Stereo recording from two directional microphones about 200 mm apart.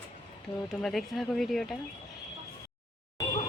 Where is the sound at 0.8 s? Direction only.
Centre (ahead or behind).